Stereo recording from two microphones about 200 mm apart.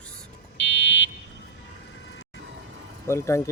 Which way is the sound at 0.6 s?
65° left (ahead or behind).